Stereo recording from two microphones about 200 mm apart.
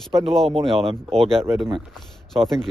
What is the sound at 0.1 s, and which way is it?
Speech, 15° right (ahead or behind).